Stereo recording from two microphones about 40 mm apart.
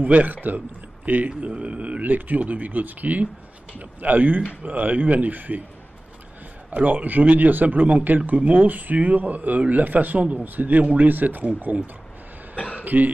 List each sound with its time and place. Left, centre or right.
0.0 s speech: right
6.7 s speech: right
10.4 s speech: right
10.8 s speech: right
11.1 s speech: right
12.5 s throat clearing: left
12.8 s speech: right